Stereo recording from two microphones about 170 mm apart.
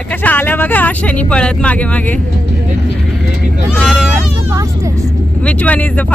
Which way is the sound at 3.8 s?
Centre (ahead or behind).